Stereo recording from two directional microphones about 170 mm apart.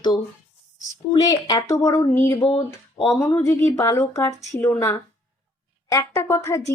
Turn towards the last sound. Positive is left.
turn(degrees=15)  # may be behind; listen again after turning